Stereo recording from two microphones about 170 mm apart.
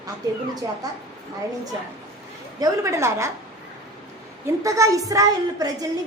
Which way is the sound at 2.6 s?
15° right (ahead or behind).